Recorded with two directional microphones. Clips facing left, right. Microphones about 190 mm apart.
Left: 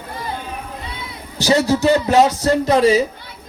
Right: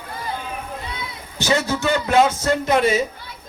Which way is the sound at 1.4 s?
35° left (ahead or behind).